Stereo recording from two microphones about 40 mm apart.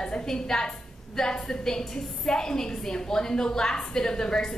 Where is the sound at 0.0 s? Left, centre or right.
Centre.